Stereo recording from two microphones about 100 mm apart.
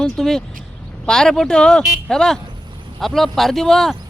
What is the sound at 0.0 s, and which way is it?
Speech, 5° left (ahead or behind).